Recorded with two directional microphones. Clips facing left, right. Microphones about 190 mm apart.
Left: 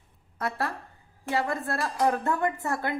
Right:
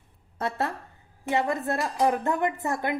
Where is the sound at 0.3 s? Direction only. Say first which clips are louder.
Right 2 dB; 25° right (ahead or behind).